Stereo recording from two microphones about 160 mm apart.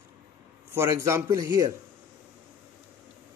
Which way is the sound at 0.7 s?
15° right (ahead or behind).